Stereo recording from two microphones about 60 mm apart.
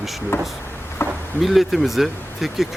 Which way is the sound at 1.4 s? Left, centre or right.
Centre.